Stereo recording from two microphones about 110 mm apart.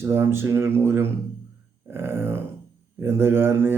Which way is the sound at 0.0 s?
20° right (ahead or behind).